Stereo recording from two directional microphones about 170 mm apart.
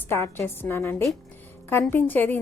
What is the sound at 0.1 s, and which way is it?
A woman's voice, 15° left (ahead or behind).